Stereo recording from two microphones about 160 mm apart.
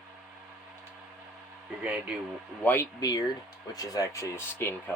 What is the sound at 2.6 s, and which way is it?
Speech, 15° left (ahead or behind).